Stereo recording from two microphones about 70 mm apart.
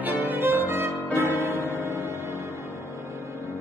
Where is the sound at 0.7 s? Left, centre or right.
Right.